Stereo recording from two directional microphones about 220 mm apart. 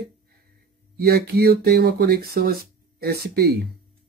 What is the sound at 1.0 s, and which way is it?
Speech, 45° right (ahead or behind).